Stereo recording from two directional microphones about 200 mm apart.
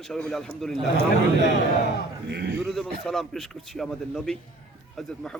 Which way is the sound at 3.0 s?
Centre (ahead or behind).